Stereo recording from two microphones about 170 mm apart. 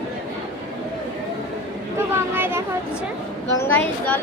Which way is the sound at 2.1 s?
10° right (ahead or behind).